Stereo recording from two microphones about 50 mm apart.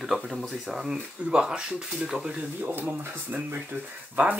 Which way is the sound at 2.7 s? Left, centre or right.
Right.